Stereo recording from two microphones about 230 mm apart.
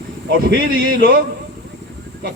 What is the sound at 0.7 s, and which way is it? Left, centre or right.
Speech, right.